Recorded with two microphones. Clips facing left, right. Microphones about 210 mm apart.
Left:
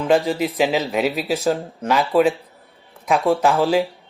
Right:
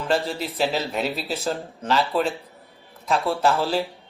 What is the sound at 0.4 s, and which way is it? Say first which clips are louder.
Speech: left 5 dB; 15° left (ahead or behind).